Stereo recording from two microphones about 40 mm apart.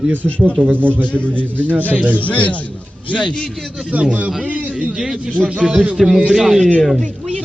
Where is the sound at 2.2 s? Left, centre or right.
Left.